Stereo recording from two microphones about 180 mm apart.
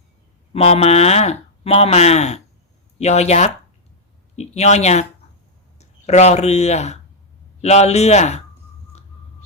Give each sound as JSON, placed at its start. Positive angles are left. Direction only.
{"t": 0.5, "sound": "speech", "side_deg": 35}